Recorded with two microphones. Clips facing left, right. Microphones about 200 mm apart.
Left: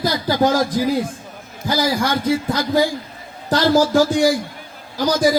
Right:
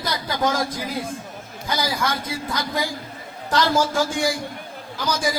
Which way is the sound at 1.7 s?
30° left (ahead or behind).